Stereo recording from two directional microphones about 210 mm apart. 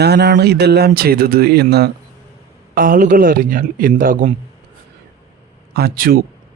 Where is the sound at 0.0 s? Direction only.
50° right (ahead or behind).